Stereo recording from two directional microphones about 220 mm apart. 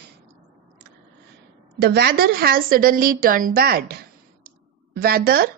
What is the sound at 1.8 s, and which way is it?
Speech, 45° right (ahead or behind).